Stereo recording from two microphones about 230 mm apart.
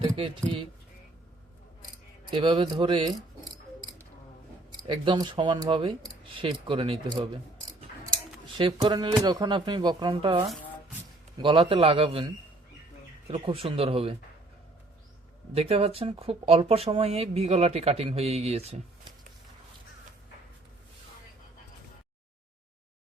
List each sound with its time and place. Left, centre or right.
2.3 s a sound: right
4.7 s speech: centre
13.3 s speech: right
15.5 s speech: right